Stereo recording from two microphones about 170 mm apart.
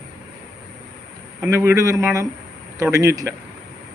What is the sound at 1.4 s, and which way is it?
A man's voice, 15° right (ahead or behind).